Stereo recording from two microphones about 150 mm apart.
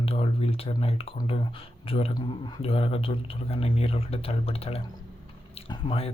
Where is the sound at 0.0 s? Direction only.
40° left (ahead or behind).